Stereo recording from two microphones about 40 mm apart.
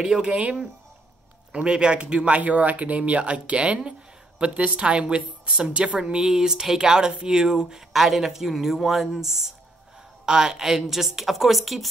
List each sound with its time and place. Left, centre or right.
0.0 s speech: right
6.1 s speech: centre
7.1 s speech: right
7.3 s speech: centre
7.9 s speech: centre